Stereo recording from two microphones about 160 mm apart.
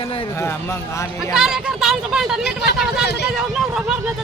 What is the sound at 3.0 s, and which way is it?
Speech, 90° left.